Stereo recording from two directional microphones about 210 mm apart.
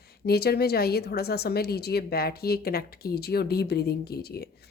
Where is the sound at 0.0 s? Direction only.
50° left (ahead or behind).